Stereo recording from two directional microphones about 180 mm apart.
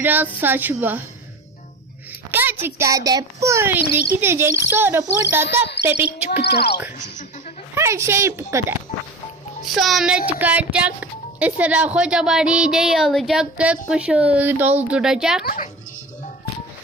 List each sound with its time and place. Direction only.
0.0 s speech: 10° right (ahead or behind)
2.3 s speech: 10° right (ahead or behind)
6.4 s speech: 65° left (ahead or behind)
7.8 s speech: 15° right (ahead or behind)
9.6 s speech: centre (ahead or behind)
15.4 s speech: 45° left (ahead or behind)